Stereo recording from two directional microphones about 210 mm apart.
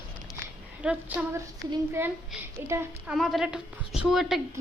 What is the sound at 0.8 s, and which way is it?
A woman's voice, 5° right (ahead or behind).